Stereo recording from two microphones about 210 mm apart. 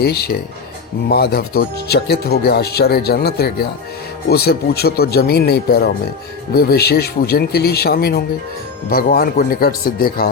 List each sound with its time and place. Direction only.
0.0 s speech: 50° left (ahead or behind)